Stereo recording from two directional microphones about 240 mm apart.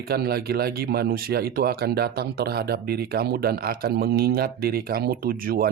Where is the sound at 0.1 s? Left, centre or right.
Right.